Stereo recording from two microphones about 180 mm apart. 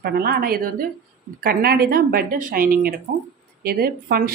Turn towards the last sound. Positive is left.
turn(degrees=-55)  # may be behind; listen again after turning